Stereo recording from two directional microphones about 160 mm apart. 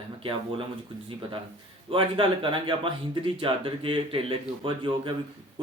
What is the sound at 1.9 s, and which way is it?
Speech, 30° right (ahead or behind).